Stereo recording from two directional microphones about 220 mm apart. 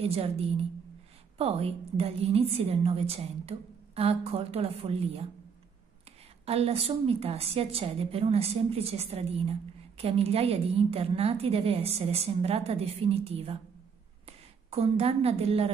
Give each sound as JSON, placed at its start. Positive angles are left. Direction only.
{"t": 0.0, "sound": "a woman's voice", "side_deg": -25}
{"t": 6.4, "sound": "a woman's voice", "side_deg": -25}